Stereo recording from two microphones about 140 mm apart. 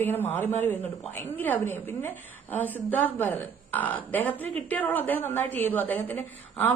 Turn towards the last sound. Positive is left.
turn(degrees=15)  # may be behind; listen again after turning